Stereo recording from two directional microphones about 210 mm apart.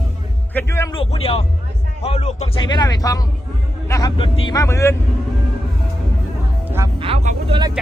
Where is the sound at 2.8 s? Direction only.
20° left (ahead or behind).